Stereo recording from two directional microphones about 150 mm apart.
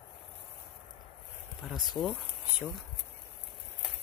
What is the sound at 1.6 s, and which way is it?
Speech, centre (ahead or behind).